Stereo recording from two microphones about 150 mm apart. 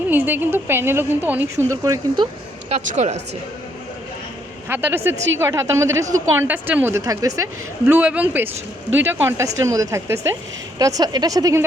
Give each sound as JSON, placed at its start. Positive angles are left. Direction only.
{"t": 0.1, "sound": "speech", "side_deg": -15}
{"t": 2.6, "sound": "speech", "side_deg": -50}
{"t": 4.7, "sound": "speech", "side_deg": -15}
{"t": 7.9, "sound": "speech", "side_deg": -10}